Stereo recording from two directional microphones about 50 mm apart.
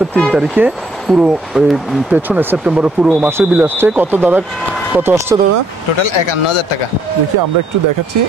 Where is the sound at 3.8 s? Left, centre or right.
Right.